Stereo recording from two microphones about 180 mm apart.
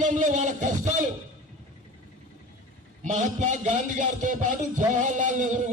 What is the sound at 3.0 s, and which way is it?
A man's voice, 40° right (ahead or behind).